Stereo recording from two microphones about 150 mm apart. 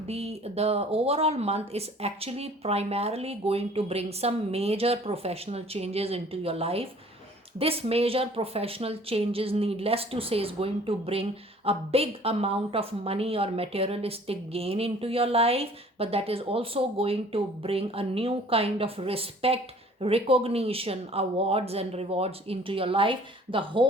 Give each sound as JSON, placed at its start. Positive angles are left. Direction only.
{"t": 0.1, "sound": "a woman's voice", "side_deg": -45}